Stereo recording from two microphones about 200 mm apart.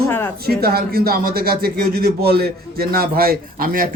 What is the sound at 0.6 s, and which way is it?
A man's voice, 50° right (ahead or behind).